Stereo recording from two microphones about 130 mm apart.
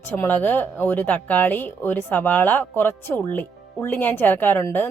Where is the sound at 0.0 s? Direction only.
15° left (ahead or behind).